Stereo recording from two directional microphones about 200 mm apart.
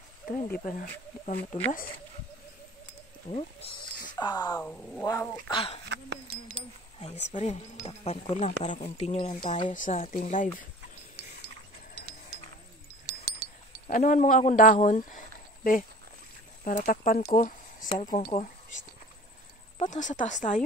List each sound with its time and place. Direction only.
0.5 s speech: 40° left (ahead or behind)
3.3 s speech: 30° left (ahead or behind)
4.6 s speech: 5° left (ahead or behind)
5.5 s speech: 30° left (ahead or behind)
5.9 s speech: 60° right (ahead or behind)
7.0 s speech: 30° left (ahead or behind)
9.7 s speech: 40° left (ahead or behind)
13.8 s speech: 40° left (ahead or behind)